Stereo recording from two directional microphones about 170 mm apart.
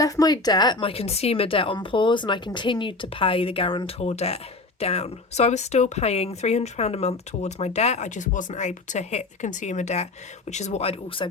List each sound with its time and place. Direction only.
0.0 s a woman's voice: 20° left (ahead or behind)